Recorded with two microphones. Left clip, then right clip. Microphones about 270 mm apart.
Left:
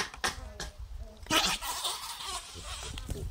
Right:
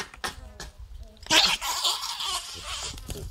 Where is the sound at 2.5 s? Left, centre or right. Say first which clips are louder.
Right 7 dB; right.